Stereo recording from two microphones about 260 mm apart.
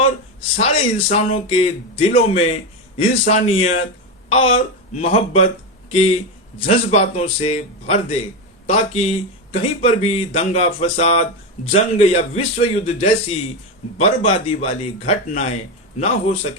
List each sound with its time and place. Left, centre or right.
0.5 s speech: left
6.6 s speech: left